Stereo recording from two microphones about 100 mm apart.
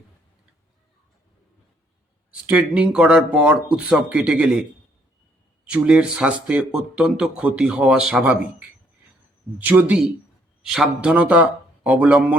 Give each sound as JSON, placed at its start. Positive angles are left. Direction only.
{"t": 2.3, "sound": "speech", "side_deg": -10}
{"t": 5.6, "sound": "speech", "side_deg": -10}